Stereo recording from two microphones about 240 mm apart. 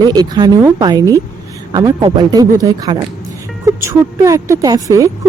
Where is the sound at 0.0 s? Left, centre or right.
Centre.